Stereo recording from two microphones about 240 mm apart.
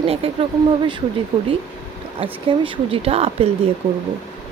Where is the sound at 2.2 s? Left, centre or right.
Right.